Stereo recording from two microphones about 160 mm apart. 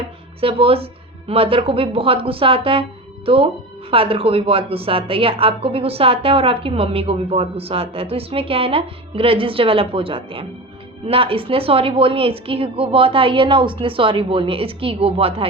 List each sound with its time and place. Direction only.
0.3 s speech: 35° right (ahead or behind)